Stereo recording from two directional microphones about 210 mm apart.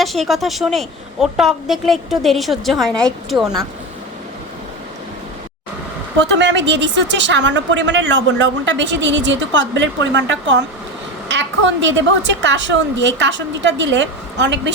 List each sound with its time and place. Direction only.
0.0 s a woman's voice: centre (ahead or behind)
6.1 s a woman's voice: 55° right (ahead or behind)